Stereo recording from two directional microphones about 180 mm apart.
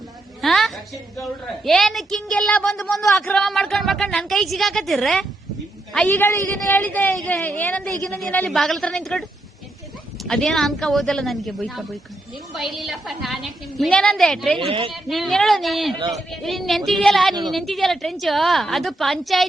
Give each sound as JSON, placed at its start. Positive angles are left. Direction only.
{"t": 0.4, "sound": "a sound", "side_deg": 0}
{"t": 1.2, "sound": "a woman's voice", "side_deg": 0}
{"t": 10.2, "sound": "a woman's voice", "side_deg": 5}
{"t": 14.7, "sound": "a woman's voice", "side_deg": -30}
{"t": 15.1, "sound": "a woman's voice", "side_deg": 0}